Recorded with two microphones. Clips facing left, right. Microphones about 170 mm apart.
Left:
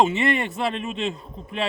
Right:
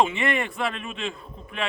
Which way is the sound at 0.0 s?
35° left (ahead or behind).